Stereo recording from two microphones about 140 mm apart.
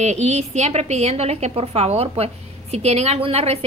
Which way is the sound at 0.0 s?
55° right (ahead or behind).